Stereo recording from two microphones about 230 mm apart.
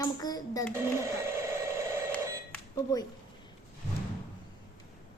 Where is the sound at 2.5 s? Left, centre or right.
Centre.